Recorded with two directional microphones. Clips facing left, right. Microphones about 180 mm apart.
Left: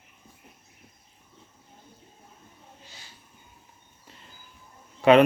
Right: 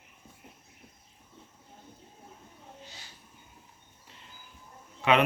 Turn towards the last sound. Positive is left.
turn(degrees=40)  # may be behind; listen again after turning